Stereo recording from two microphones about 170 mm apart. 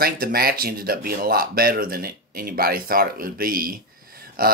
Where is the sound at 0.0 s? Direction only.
60° right (ahead or behind).